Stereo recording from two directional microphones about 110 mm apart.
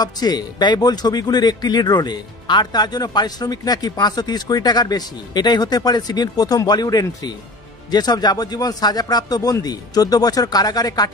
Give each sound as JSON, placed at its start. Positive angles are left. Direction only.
{"t": 0.0, "sound": "speech", "side_deg": 40}